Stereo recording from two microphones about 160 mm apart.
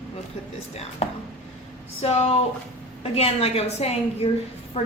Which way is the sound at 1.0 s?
40° left (ahead or behind).